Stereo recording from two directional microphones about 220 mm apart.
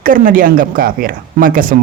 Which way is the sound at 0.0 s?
40° right (ahead or behind).